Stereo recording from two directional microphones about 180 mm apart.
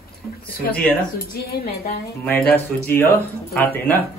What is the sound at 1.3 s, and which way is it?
Speech, 55° left (ahead or behind).